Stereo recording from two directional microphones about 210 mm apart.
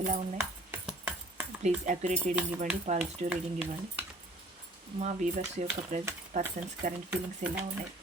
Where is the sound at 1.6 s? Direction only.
35° right (ahead or behind).